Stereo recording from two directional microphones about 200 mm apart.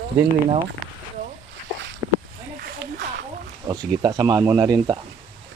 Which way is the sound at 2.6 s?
55° right (ahead or behind).